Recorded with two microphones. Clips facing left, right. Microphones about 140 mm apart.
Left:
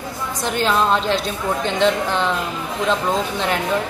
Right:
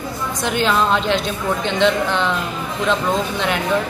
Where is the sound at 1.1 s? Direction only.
35° left (ahead or behind).